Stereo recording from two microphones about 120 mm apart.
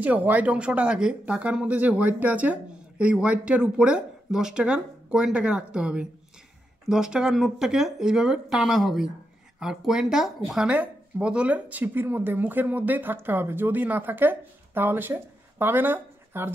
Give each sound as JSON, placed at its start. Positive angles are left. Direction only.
{"t": 0.0, "sound": "speech", "side_deg": -15}